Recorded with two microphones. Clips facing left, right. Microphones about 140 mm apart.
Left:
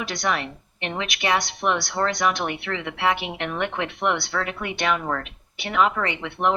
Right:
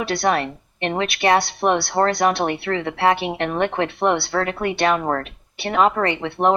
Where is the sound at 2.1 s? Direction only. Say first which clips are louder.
Right 5 dB; 40° right (ahead or behind).